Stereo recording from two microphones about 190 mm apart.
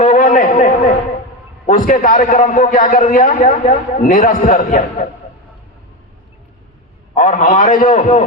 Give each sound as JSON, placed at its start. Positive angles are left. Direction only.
{"t": 0.0, "sound": "a sound", "side_deg": 40}
{"t": 1.6, "sound": "a man's voice", "side_deg": 45}
{"t": 7.1, "sound": "a man's voice", "side_deg": 40}